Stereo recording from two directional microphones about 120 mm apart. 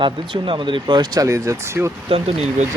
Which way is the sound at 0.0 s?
45° right (ahead or behind).